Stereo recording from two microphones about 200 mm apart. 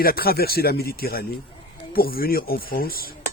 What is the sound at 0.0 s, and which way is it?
Speech, 50° left (ahead or behind).